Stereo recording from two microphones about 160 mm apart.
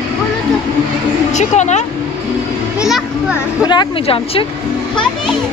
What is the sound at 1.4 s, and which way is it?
Speech, 45° left (ahead or behind).